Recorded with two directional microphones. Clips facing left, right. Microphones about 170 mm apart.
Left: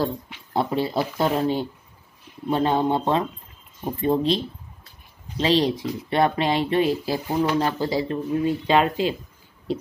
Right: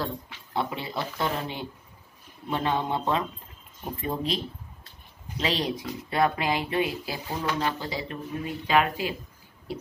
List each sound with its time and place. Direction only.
0.0 s speech: 35° left (ahead or behind)
5.4 s speech: 30° left (ahead or behind)